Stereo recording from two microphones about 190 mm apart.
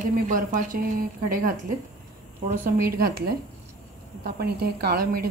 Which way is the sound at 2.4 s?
45° right (ahead or behind).